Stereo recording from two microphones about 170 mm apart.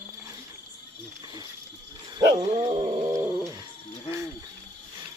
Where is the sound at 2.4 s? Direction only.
30° right (ahead or behind).